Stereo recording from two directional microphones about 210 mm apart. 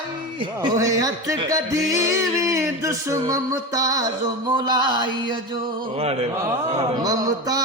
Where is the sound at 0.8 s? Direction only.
15° right (ahead or behind).